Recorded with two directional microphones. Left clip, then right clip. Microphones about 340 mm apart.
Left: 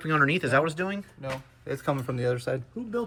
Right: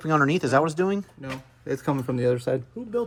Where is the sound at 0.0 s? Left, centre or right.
Centre.